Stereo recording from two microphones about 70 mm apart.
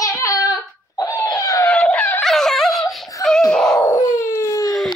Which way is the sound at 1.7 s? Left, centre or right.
Centre.